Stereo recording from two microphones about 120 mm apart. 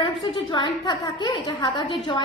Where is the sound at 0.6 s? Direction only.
40° left (ahead or behind).